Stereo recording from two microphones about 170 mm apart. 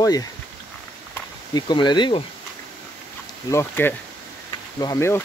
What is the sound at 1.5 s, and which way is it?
Speech, 25° left (ahead or behind).